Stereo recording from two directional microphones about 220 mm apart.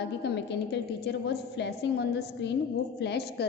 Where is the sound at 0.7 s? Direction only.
50° left (ahead or behind).